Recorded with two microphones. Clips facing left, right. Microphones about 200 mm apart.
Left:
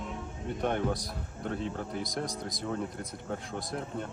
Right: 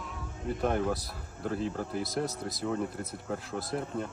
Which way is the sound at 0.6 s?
Centre (ahead or behind).